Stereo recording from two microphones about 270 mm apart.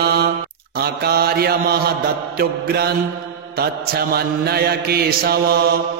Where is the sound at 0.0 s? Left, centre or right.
Right.